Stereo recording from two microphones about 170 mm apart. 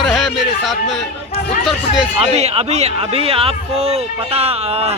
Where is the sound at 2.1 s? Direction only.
40° right (ahead or behind).